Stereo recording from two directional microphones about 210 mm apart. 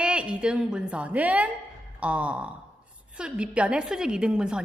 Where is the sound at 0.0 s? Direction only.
5° right (ahead or behind).